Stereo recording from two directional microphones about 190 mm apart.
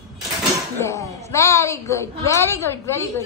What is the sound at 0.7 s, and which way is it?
A woman's voice, 15° left (ahead or behind).